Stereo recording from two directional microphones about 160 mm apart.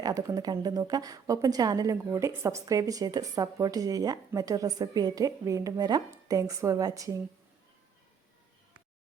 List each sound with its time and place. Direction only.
0.0 s a woman's voice: 20° right (ahead or behind)